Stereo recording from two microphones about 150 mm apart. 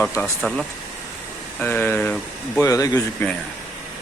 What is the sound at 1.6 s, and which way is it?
Speech, 15° left (ahead or behind).